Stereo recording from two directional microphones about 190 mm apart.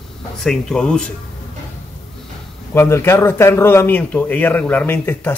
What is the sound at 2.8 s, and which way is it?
A man's voice, 15° left (ahead or behind).